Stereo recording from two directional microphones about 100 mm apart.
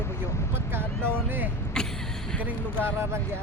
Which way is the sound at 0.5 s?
20° right (ahead or behind).